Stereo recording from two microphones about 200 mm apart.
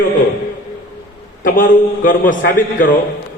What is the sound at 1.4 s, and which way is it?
A man's voice, 40° left (ahead or behind).